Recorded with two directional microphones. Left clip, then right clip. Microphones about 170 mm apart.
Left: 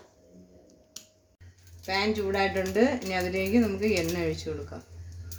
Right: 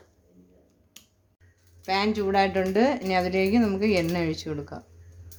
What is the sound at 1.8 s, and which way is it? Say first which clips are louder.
Speech: right 3 dB; 65° right (ahead or behind).